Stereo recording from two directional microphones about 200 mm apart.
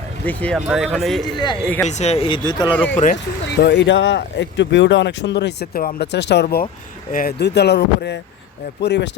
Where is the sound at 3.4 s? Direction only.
60° left (ahead or behind).